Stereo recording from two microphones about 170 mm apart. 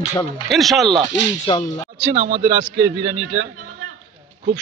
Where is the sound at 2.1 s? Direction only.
40° right (ahead or behind).